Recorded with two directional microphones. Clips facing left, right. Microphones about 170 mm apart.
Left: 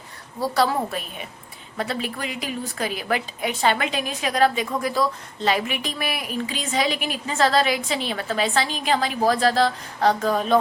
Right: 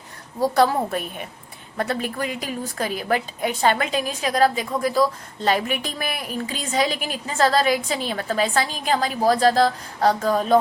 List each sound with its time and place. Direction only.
0.5 s a woman's voice: 50° right (ahead or behind)